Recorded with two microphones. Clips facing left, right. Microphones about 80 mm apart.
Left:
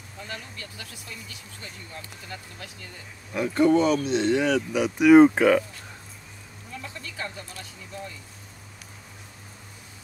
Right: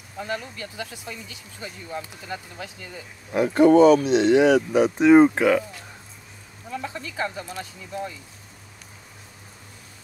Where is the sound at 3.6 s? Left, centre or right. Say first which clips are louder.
Right 6 dB; right.